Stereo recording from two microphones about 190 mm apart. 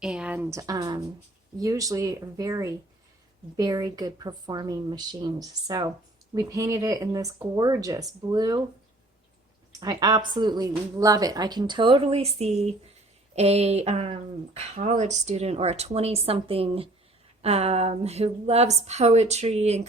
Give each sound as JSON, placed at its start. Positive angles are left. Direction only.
{"t": 0.0, "sound": "speech", "side_deg": -5}
{"t": 0.7, "sound": "speech", "side_deg": -20}
{"t": 9.8, "sound": "speech", "side_deg": -20}